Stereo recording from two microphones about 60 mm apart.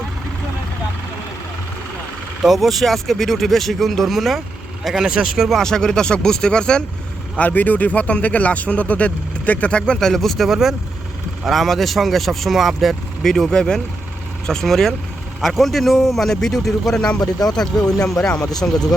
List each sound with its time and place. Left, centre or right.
2.4 s speech: centre
5.5 s speech: centre
7.3 s speech: left; by 18.4 s centre